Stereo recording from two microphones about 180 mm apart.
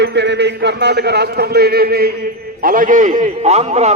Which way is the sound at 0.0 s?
70° right (ahead or behind).